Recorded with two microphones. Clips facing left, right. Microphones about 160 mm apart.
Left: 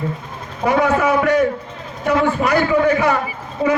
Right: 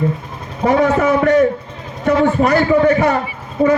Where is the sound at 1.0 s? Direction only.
45° right (ahead or behind).